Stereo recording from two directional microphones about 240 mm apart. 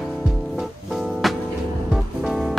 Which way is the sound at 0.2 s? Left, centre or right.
Centre.